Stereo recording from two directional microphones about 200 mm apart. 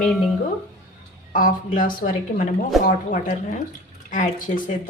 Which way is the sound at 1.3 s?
40° left (ahead or behind).